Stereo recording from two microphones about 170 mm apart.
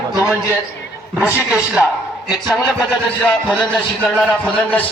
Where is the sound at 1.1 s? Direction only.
5° right (ahead or behind).